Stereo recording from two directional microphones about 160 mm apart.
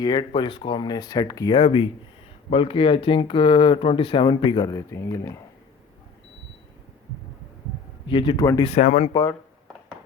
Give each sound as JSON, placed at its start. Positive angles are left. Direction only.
{"t": 0.0, "sound": "speech", "side_deg": 30}
{"t": 8.0, "sound": "speech", "side_deg": 30}
{"t": 8.6, "sound": "speech", "side_deg": 45}